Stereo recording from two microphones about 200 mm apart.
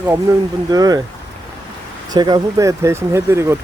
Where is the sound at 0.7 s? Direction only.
20° right (ahead or behind).